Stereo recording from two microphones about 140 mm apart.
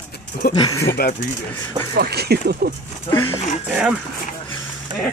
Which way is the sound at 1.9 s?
90° right.